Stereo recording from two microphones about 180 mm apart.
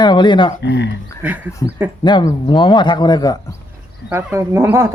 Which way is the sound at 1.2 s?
10° right (ahead or behind).